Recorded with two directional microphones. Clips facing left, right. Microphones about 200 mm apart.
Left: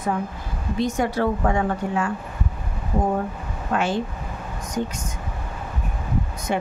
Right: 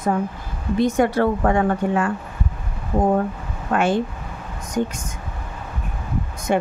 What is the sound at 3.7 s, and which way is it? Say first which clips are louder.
Speech: right 3 dB; 50° right (ahead or behind).